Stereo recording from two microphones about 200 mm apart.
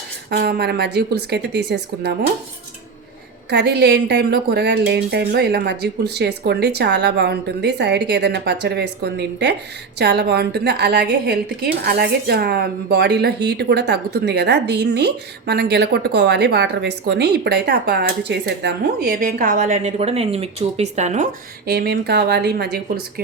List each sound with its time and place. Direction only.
0.3 s a woman's voice: 50° right (ahead or behind)
3.5 s a woman's voice: 55° right (ahead or behind); by 21.2 s 35° right (ahead or behind)
21.7 s speech: 55° right (ahead or behind)